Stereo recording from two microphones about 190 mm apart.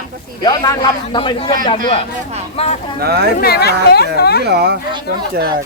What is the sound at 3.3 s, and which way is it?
Speech, 55° left (ahead or behind).